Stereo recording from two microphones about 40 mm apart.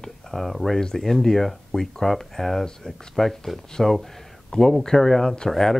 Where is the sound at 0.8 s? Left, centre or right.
Centre.